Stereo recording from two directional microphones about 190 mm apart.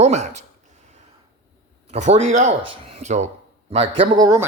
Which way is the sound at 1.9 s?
35° right (ahead or behind).